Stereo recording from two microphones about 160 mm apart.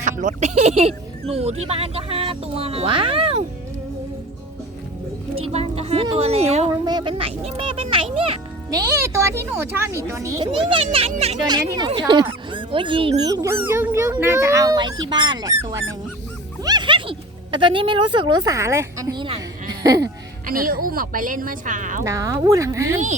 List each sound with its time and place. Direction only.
0.0 s speech: 50° right (ahead or behind)
5.3 s speech: 40° right (ahead or behind)
6.7 s speech: 25° right (ahead or behind)
8.7 s speech: 20° right (ahead or behind)
10.4 s speech: 30° right (ahead or behind)
11.4 s speech: 25° right (ahead or behind)
16.6 s speech: 30° right (ahead or behind)
20.5 s speech: 60° right (ahead or behind)
22.0 s speech: 20° right (ahead or behind)